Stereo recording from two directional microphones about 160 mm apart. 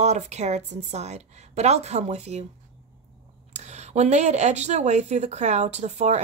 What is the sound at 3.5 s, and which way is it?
A woman's voice, 45° right (ahead or behind).